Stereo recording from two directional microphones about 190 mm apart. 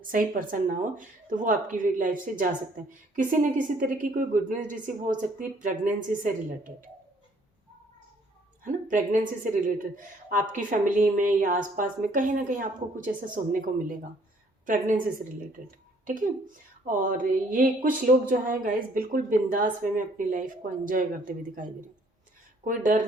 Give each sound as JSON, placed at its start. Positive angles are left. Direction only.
{"t": 0.0, "sound": "speech", "side_deg": -45}
{"t": 8.6, "sound": "speech", "side_deg": -45}
{"t": 16.8, "sound": "speech", "side_deg": -45}